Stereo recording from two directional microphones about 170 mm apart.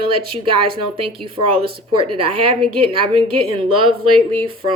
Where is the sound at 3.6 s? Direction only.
30° right (ahead or behind).